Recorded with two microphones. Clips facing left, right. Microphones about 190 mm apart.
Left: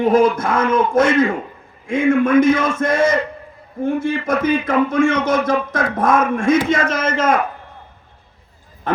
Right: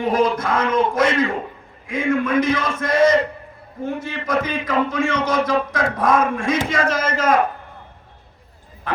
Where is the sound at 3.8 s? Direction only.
50° left (ahead or behind).